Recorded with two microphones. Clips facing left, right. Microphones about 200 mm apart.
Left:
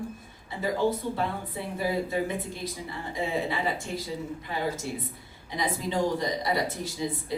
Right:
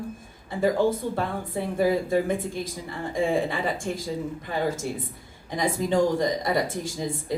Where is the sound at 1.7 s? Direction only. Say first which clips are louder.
Right 6 dB; 50° right (ahead or behind).